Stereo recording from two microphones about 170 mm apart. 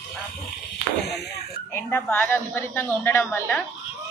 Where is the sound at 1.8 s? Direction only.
10° left (ahead or behind).